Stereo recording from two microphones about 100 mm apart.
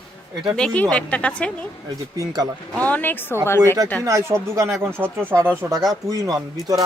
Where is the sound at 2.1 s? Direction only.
40° right (ahead or behind).